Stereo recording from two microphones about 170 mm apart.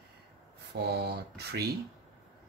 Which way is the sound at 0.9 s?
70° right (ahead or behind).